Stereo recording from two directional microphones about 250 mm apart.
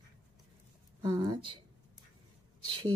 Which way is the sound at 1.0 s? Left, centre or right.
Centre.